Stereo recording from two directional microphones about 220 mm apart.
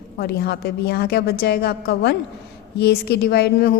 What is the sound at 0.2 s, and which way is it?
A woman's voice, 45° left (ahead or behind).